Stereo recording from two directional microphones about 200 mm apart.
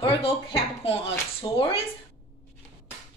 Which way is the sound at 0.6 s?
30° left (ahead or behind).